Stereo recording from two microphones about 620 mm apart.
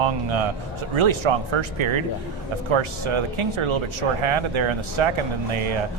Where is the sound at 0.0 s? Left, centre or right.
Right.